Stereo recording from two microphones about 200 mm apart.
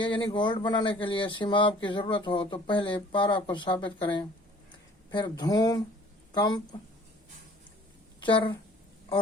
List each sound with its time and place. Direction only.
0.0 s speech: 25° left (ahead or behind)
8.2 s speech: 25° left (ahead or behind)